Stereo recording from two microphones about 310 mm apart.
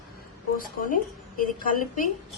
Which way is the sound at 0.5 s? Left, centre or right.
Left.